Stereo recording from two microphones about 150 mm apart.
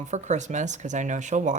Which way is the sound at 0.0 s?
50° right (ahead or behind).